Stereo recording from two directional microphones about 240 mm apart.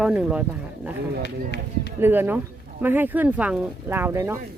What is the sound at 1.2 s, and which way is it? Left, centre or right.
Speech, left.